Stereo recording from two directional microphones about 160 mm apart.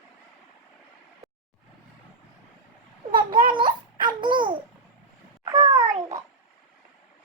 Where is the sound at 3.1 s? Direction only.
30° right (ahead or behind).